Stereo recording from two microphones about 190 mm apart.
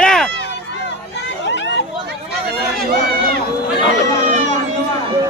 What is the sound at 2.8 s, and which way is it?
Run, 50° right (ahead or behind).